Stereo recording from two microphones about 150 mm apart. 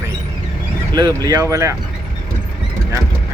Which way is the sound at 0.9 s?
30° right (ahead or behind).